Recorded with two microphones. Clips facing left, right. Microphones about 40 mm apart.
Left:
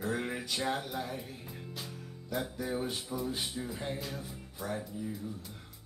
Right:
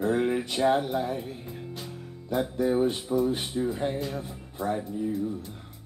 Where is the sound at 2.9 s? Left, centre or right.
Right.